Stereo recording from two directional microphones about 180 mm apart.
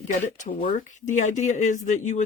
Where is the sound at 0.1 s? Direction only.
45° left (ahead or behind).